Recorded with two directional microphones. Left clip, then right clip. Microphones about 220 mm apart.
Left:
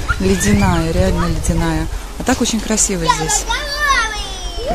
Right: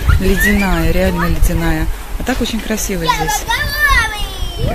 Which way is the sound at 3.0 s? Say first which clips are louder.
Right 3 dB; 30° right (ahead or behind).